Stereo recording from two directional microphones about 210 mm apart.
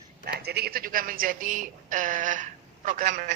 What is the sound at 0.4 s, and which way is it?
A woman's voice, 50° right (ahead or behind).